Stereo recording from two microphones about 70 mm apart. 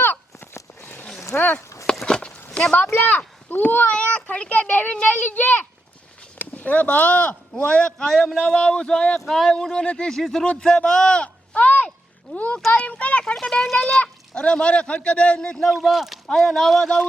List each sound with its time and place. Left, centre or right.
0.0 s a sound: left
1.4 s a child's voice: left
1.9 s a sound: centre
2.9 s a child's voice: left
10.2 s a man's voice: centre
13.3 s speech: centre